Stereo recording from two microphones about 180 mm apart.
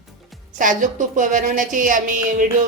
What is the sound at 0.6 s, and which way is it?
A woman's voice, 45° right (ahead or behind).